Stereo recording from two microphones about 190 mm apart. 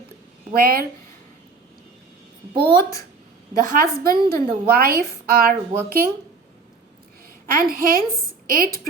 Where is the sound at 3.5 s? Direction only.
45° right (ahead or behind).